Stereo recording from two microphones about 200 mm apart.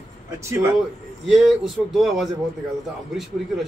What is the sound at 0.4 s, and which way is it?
Speech, 15° right (ahead or behind).